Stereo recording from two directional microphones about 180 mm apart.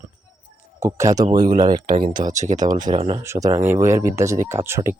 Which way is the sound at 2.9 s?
25° right (ahead or behind).